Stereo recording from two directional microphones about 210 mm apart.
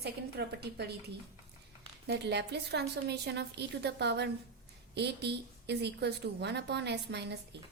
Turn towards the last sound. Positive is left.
turn(degrees=-55)  # may be behind; listen again after turning